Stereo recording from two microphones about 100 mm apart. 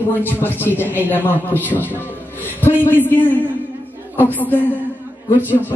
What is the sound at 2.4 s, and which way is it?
Music, 20° right (ahead or behind).